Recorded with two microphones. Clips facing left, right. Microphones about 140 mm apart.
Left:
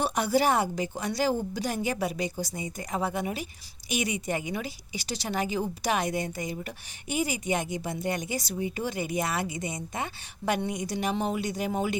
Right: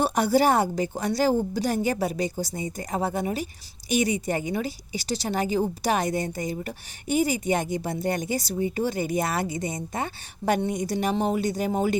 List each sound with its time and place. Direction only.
0.0 s a woman's voice: 35° right (ahead or behind)